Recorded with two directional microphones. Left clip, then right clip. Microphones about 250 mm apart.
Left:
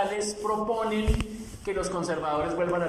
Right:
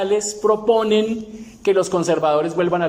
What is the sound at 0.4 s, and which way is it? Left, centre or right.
Speech, right.